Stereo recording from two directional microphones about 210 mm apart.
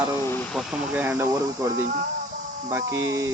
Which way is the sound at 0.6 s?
5° right (ahead or behind).